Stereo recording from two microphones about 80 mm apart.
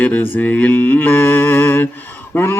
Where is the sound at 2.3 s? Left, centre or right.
Left.